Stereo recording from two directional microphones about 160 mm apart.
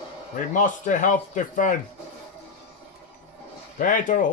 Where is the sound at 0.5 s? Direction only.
55° left (ahead or behind).